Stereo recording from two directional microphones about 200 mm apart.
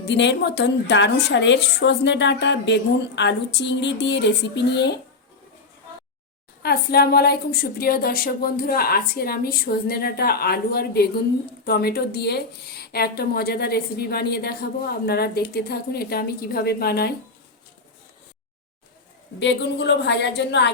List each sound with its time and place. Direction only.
0.0 s a woman's voice: 60° left (ahead or behind)
6.6 s speech: 50° left (ahead or behind)
19.4 s a woman's voice: 60° left (ahead or behind)